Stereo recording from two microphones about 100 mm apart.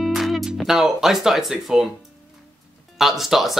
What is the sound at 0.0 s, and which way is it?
Speech, centre (ahead or behind).